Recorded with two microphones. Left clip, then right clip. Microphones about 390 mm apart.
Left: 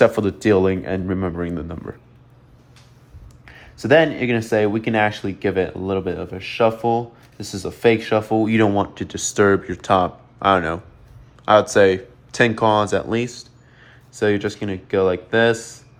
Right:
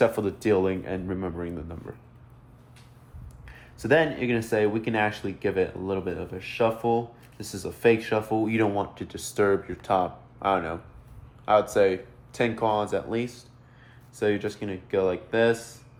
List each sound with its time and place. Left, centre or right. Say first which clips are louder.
0.0 s speech: left 8 dB; left
3.4 s speech: left 7 dB; left